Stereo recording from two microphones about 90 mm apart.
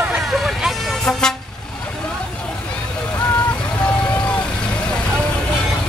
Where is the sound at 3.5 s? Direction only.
10° left (ahead or behind).